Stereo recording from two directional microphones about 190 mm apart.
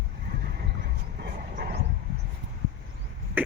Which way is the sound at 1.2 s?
55° right (ahead or behind).